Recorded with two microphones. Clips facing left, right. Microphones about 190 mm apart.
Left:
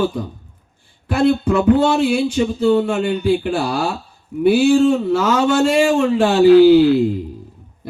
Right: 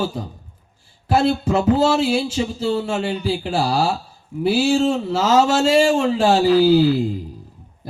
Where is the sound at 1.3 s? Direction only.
65° left (ahead or behind).